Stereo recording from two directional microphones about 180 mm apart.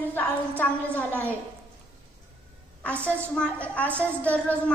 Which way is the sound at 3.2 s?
5° left (ahead or behind).